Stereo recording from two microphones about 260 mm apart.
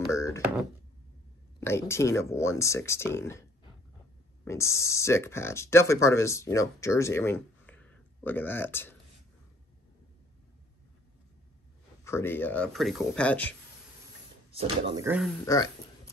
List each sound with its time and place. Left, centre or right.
0.0 s a sound: centre
1.6 s speech: centre
4.5 s speech: centre
12.0 s speech: centre
14.5 s speech: right
15.4 s speech: centre